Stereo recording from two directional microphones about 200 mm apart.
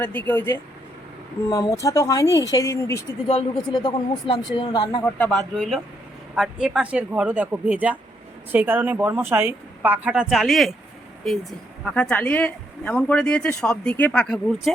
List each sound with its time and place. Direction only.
0.0 s a woman's voice: 10° left (ahead or behind)
3.2 s speech: 30° left (ahead or behind)
5.0 s a woman's voice: 5° left (ahead or behind)
11.9 s speech: 5° left (ahead or behind)